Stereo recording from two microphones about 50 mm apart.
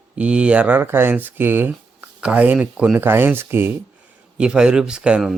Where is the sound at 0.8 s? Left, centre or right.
Right.